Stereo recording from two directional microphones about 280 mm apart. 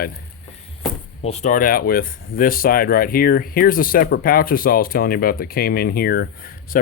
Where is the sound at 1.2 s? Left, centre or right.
Left.